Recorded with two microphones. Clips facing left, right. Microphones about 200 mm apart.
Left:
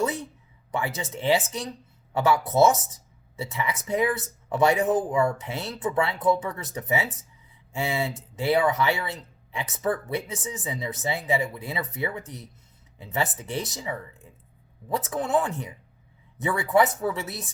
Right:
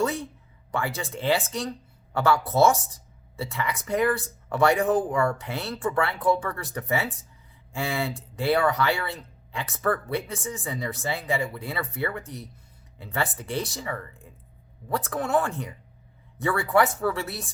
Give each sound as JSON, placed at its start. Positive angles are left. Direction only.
{"t": 0.0, "sound": "speech", "side_deg": 20}